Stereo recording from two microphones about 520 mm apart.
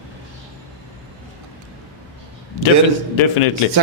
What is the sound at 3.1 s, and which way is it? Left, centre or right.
Speech, left.